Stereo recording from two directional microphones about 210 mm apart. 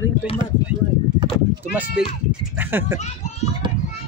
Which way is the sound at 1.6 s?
5° right (ahead or behind).